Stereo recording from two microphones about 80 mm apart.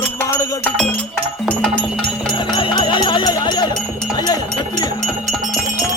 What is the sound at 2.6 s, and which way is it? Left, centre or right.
Music, left.